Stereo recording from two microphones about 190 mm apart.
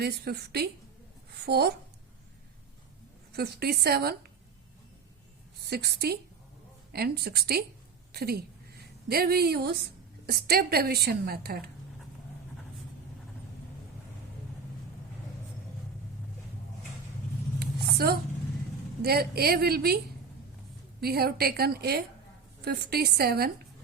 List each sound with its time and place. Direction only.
0.0 s a woman's voice: 55° right (ahead or behind)
3.3 s a woman's voice: 55° right (ahead or behind)
5.6 s a woman's voice: 55° right (ahead or behind)
17.9 s a sound: 55° right (ahead or behind)
19.0 s a woman's voice: 55° right (ahead or behind)
21.0 s a woman's voice: 55° right (ahead or behind)